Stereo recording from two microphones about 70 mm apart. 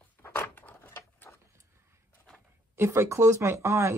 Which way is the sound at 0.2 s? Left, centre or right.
Left.